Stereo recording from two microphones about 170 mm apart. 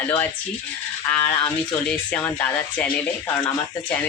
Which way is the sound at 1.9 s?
5° left (ahead or behind).